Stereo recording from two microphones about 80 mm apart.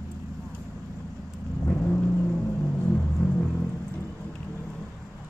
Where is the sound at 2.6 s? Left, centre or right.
Left.